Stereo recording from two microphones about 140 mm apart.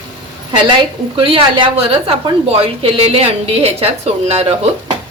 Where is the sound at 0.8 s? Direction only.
40° right (ahead or behind).